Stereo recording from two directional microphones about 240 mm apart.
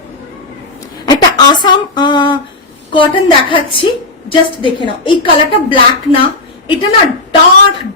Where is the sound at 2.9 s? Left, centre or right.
Centre.